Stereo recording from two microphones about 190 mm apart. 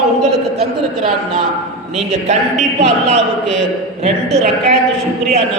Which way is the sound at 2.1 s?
35° right (ahead or behind).